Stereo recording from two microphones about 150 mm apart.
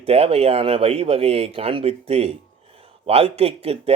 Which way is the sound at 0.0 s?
40° right (ahead or behind).